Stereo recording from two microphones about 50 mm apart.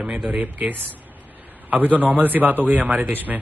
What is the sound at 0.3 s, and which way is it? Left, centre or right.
A man's voice, right.